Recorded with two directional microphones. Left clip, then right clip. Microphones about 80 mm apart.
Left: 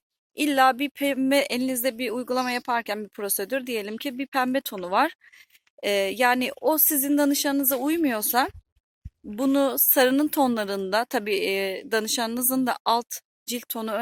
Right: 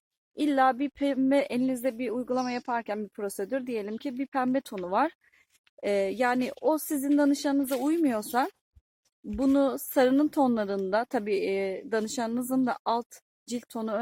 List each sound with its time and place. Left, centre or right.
0.3 s a woman's voice: centre
7.9 s a woman's voice: left
9.4 s a woman's voice: centre